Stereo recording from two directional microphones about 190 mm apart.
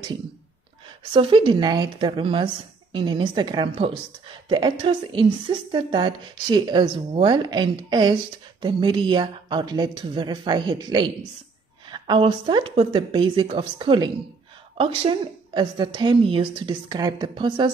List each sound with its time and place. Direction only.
0.8 s a woman's voice: 25° right (ahead or behind)